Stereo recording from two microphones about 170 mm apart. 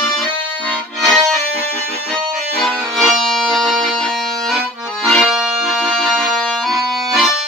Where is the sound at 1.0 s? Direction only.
Centre (ahead or behind).